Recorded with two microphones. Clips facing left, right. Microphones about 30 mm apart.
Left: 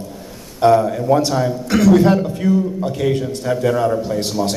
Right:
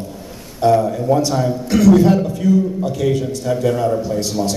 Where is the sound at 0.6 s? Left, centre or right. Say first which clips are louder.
Left 1 dB; left.